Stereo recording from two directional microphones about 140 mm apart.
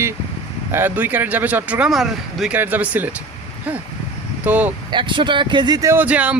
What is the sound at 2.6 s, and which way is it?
Speech, 15° right (ahead or behind).